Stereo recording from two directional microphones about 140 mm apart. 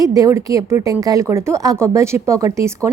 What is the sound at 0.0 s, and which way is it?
Speech, 25° right (ahead or behind).